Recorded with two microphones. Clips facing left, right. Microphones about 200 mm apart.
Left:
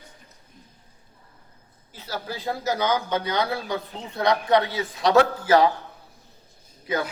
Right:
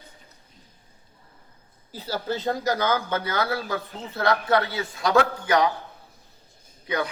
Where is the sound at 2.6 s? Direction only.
10° left (ahead or behind).